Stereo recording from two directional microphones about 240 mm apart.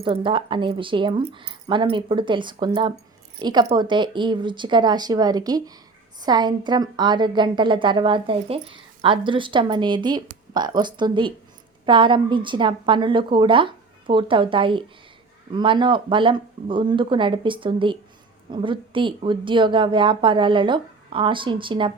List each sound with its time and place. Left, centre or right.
0.0 s a woman's voice: right